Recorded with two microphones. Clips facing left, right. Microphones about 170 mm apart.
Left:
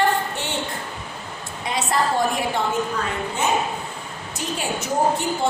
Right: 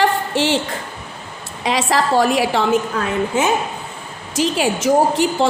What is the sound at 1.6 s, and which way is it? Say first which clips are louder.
A woman's voice: right 5 dB; 90° right.